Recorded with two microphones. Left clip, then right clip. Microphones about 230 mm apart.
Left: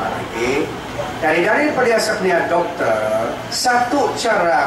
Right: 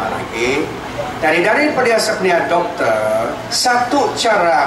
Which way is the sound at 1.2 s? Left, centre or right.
Centre.